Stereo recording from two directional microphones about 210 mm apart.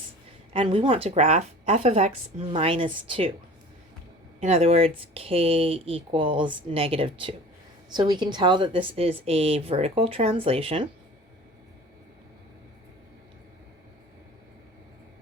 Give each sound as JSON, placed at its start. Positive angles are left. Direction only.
{"t": 0.5, "sound": "a woman's voice", "side_deg": -25}
{"t": 4.4, "sound": "a woman's voice", "side_deg": -30}